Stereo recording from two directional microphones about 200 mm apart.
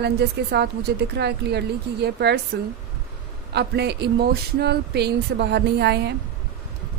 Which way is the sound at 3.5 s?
55° right (ahead or behind).